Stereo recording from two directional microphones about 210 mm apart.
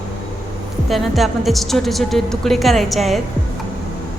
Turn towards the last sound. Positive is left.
turn(degrees=0)  # may be behind; listen again after turning